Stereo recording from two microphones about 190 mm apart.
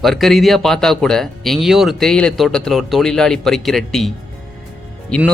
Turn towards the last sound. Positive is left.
turn(degrees=5)  # may be behind; listen again after turning